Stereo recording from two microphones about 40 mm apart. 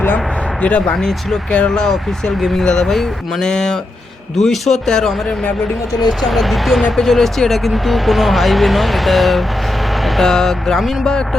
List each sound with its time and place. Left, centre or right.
0.9 s speech: centre
1.5 s speech: left
1.8 s speech: centre
6.1 s speech: centre